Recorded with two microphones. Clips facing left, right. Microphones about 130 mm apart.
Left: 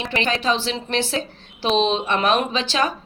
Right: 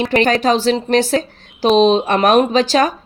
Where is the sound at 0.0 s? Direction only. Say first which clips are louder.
Right 8 dB; 45° right (ahead or behind).